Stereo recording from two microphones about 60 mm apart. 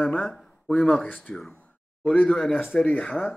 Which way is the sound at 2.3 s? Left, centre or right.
Centre.